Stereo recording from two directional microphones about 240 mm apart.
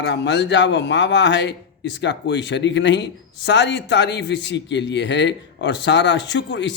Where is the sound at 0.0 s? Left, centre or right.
Left.